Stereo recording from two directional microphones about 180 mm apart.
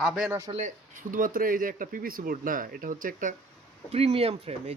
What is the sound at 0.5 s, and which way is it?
Speech, 45° right (ahead or behind).